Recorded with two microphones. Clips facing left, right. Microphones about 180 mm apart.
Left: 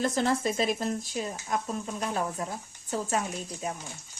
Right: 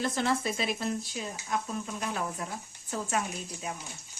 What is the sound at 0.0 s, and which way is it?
Speech, 40° left (ahead or behind).